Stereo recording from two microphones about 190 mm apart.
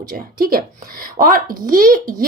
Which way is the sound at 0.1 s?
50° right (ahead or behind).